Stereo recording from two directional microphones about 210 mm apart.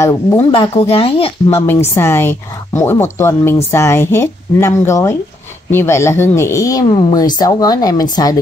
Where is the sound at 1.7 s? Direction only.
10° left (ahead or behind).